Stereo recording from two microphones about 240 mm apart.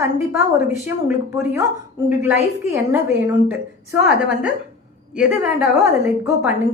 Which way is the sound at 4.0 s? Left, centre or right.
Centre.